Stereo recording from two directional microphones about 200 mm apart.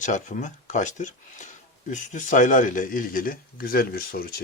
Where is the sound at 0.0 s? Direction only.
40° left (ahead or behind).